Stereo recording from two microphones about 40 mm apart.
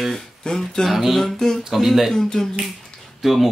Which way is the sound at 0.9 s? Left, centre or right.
Centre.